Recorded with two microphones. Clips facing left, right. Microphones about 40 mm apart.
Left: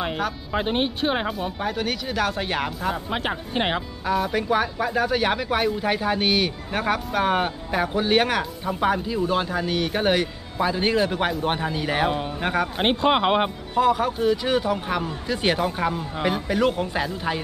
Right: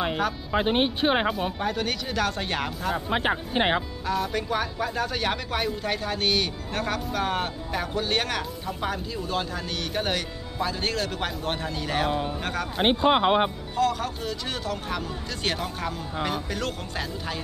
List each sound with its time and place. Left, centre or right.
0.0 s speech: centre
1.6 s speech: centre
4.0 s speech: centre
12.8 s speech: left
13.7 s speech: centre